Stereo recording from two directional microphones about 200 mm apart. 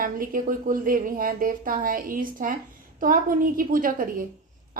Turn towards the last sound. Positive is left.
turn(degrees=-45)  # may be behind; listen again after turning